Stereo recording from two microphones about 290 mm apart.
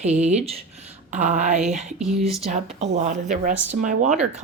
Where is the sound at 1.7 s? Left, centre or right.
Centre.